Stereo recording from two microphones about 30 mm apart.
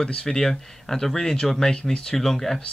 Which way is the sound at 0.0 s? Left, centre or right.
Left.